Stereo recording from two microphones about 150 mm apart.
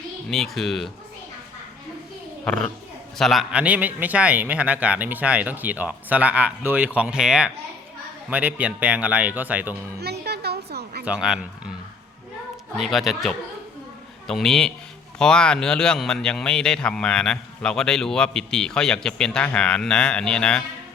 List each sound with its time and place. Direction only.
0.3 s a man's voice: centre (ahead or behind)
2.4 s a child's voice: 5° left (ahead or behind); by 9.7 s 10° right (ahead or behind)
10.0 s a sound: 90° right
11.0 s speech: 5° right (ahead or behind)
12.7 s a man's voice: centre (ahead or behind)